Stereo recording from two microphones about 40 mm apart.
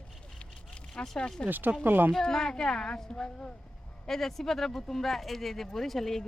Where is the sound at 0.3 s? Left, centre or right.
Left.